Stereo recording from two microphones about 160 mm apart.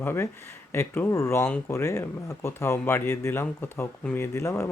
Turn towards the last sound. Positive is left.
turn(degrees=15)  # may be behind; listen again after turning